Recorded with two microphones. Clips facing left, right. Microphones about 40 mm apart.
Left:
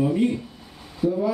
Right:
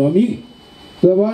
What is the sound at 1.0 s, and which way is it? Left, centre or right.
Speech, right.